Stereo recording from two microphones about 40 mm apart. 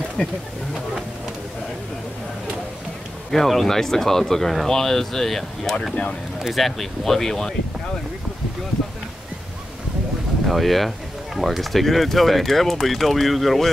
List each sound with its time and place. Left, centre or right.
0.2 s speech: centre
3.3 s speech: centre
10.4 s speech: centre